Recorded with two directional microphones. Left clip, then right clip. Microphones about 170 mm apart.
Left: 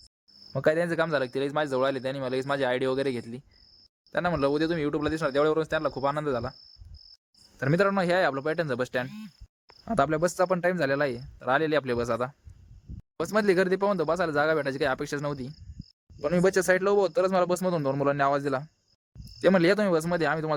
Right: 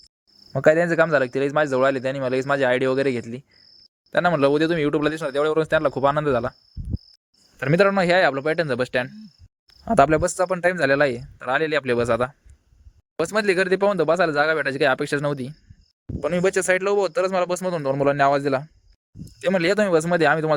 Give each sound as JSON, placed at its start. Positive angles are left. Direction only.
{"t": 0.5, "sound": "speech", "side_deg": -30}
{"t": 7.6, "sound": "speech", "side_deg": -25}